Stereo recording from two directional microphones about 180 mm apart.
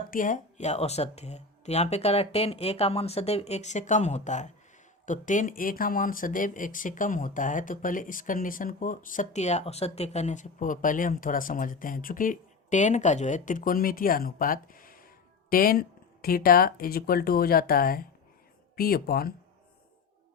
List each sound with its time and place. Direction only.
0.1 s speech: 45° left (ahead or behind)